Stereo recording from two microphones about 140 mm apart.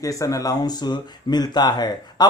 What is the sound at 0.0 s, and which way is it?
Speech, 25° left (ahead or behind).